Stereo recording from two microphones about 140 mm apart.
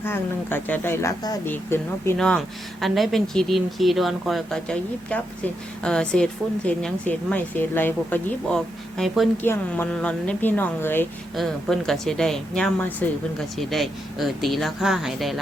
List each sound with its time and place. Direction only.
0.0 s speech: 15° left (ahead or behind)
2.1 s speech: 5° left (ahead or behind)
9.4 s speech: 15° left (ahead or behind)
11.3 s speech: centre (ahead or behind)